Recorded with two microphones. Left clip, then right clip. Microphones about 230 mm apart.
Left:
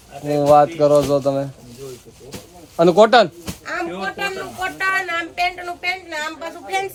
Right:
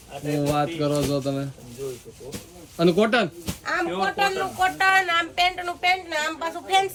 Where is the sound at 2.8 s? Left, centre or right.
Left.